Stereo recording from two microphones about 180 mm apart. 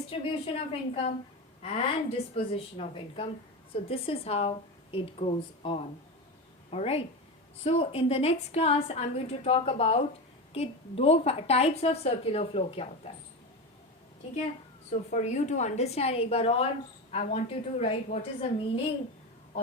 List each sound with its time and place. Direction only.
0.1 s a woman's voice: 30° left (ahead or behind)
14.8 s a woman's voice: 40° left (ahead or behind)